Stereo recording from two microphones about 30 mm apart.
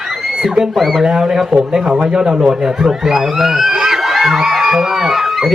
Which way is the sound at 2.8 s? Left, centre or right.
Centre.